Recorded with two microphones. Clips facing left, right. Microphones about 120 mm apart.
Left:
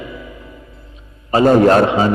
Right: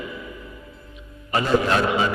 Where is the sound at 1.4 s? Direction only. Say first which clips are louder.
Left 11 dB; 50° left (ahead or behind).